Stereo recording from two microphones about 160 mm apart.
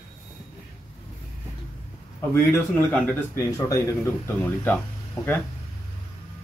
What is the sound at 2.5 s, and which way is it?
Speech, 10° left (ahead or behind).